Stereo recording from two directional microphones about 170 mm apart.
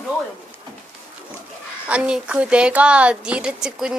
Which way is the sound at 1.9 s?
5° right (ahead or behind).